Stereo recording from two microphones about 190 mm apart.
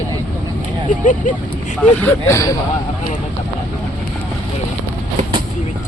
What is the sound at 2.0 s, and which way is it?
Speech, 15° left (ahead or behind).